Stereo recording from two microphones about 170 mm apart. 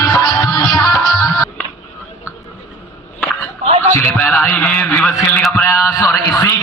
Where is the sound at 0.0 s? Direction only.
20° left (ahead or behind).